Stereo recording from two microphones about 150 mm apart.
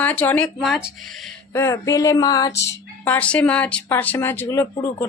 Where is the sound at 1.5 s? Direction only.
20° left (ahead or behind).